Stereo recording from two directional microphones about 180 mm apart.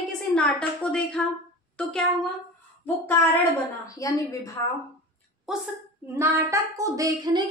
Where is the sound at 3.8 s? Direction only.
20° left (ahead or behind).